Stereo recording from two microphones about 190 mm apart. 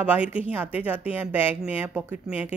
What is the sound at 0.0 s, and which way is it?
Speech, 5° right (ahead or behind).